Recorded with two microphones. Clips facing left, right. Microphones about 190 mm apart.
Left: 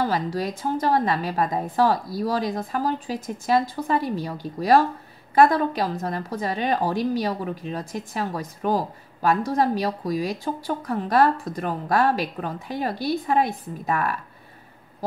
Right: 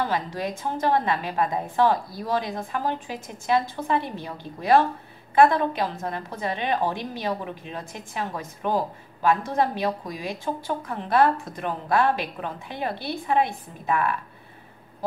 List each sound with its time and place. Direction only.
0.0 s a woman's voice: 35° left (ahead or behind)